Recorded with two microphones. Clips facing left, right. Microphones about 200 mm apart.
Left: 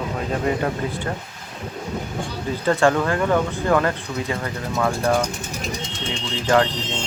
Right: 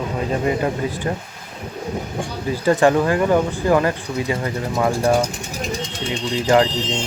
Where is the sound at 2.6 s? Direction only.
15° right (ahead or behind).